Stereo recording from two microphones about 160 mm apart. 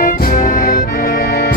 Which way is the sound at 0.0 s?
65° left (ahead or behind).